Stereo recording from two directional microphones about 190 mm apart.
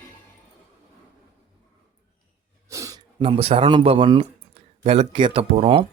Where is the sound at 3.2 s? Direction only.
30° right (ahead or behind).